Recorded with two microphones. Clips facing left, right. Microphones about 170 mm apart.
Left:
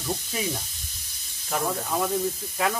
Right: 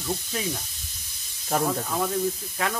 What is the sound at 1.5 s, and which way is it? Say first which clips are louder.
Speech: right 3 dB; 40° right (ahead or behind).